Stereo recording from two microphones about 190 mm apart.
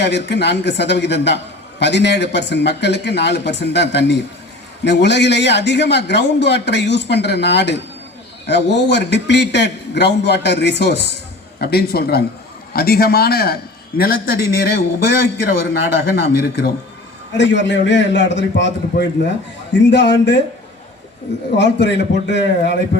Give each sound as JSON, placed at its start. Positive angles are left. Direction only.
{"t": 0.0, "sound": "a man's voice", "side_deg": 65}
{"t": 21.5, "sound": "a man's voice", "side_deg": 65}